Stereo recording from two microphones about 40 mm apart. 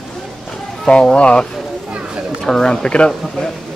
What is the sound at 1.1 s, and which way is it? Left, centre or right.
Speech, left.